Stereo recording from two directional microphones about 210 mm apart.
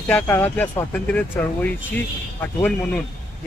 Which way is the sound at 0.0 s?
10° left (ahead or behind).